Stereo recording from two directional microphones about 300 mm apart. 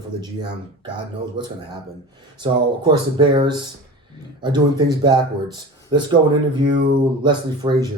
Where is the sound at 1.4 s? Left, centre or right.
Centre.